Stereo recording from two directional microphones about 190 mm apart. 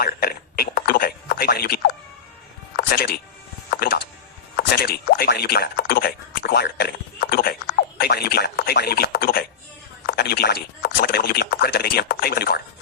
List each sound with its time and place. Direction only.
0.0 s a sound: 55° left (ahead or behind)
2.7 s music: 55° left (ahead or behind)
4.5 s speech: 55° left (ahead or behind)